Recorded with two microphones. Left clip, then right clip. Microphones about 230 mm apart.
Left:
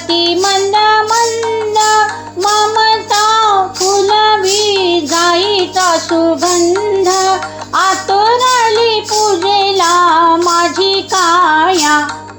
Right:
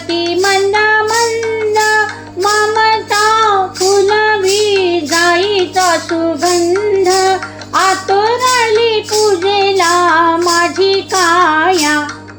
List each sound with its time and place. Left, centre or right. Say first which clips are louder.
0.1 s music: left 1 dB; centre
2.4 s child singing: even; centre
7.0 s music: even; left
9.4 s child singing: left 1 dB; centre